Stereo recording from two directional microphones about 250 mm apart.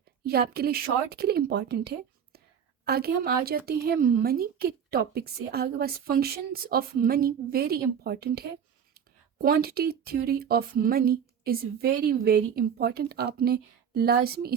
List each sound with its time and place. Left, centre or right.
0.3 s speech: right